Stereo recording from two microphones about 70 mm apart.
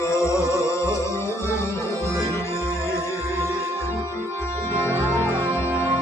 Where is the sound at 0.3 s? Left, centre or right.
Left.